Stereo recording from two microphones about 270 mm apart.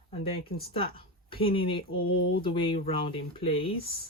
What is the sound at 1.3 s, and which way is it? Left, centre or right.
Speech, centre.